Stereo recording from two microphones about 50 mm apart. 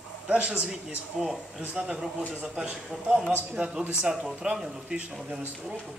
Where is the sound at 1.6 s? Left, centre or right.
Centre.